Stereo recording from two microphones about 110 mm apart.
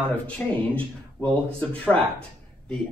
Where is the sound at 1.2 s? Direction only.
20° left (ahead or behind).